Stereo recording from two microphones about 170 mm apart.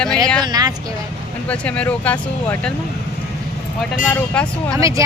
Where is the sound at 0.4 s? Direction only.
25° right (ahead or behind).